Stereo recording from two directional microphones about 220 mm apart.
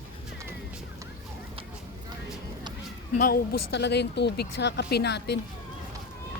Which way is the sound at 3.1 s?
40° left (ahead or behind).